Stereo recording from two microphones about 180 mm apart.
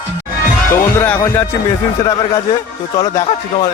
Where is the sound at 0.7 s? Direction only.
10° left (ahead or behind).